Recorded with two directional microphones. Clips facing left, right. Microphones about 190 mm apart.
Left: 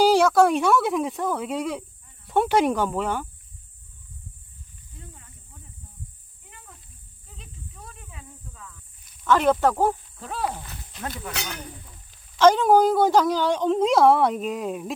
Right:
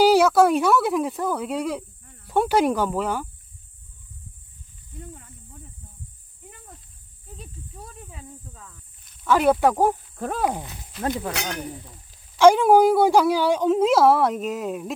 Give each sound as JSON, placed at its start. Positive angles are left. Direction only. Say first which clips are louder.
{"t": 0.0, "sound": "speech", "louder": "right 1 dB", "side_deg": -5}
{"t": 7.3, "sound": "snake", "louder": "right 4 dB", "side_deg": -35}
{"t": 9.2, "sound": "speech", "louder": "right 1 dB", "side_deg": -10}
{"t": 10.2, "sound": "speech", "louder": "right 5 dB", "side_deg": -50}
{"t": 12.4, "sound": "speech", "louder": "right 2 dB", "side_deg": -10}